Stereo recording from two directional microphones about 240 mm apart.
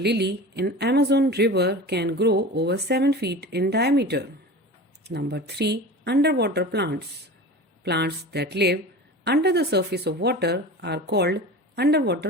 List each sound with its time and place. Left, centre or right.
0.0 s speech: right